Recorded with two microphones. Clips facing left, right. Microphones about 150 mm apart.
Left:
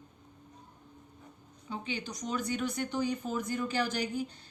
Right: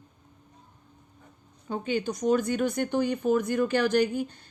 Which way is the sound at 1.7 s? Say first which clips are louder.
Right 9 dB; 50° right (ahead or behind).